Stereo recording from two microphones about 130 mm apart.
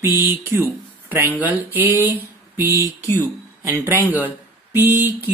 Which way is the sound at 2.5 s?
20° right (ahead or behind).